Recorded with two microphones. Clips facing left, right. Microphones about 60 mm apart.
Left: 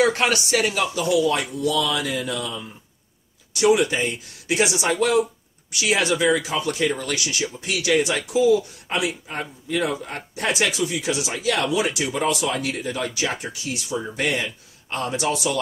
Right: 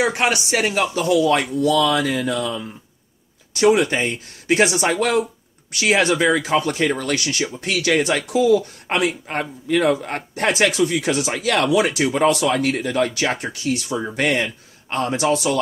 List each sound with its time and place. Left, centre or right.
0.0 s speech: centre; by 14.0 s right
14.1 s speech: right